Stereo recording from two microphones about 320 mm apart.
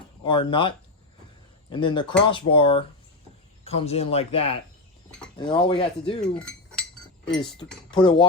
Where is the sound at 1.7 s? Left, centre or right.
Centre.